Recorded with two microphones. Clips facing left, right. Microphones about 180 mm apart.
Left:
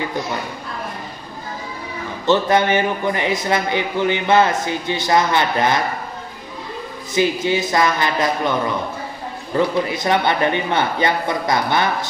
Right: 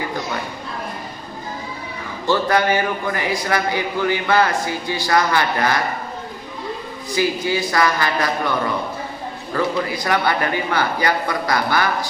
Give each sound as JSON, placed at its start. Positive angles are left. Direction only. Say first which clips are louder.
{"t": 2.2, "sound": "speech", "louder": "left 2 dB", "side_deg": 20}
{"t": 7.1, "sound": "speech", "louder": "left 2 dB", "side_deg": 20}